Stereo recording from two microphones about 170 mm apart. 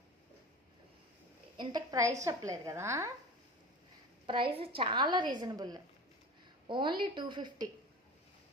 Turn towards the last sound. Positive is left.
turn(degrees=-25)  # may be behind; listen again after turning